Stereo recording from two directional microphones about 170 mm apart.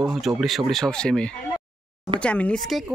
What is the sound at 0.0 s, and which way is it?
Speech, centre (ahead or behind).